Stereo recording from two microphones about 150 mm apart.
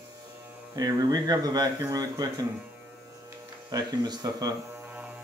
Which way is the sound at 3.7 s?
25° right (ahead or behind).